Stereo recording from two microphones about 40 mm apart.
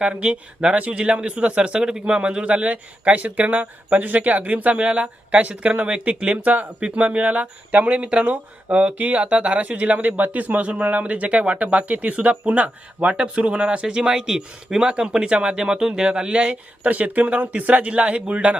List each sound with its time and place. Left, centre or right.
0.0 s speech: right
6.4 s speech: right
9.0 s speech: right
16.8 s speech: right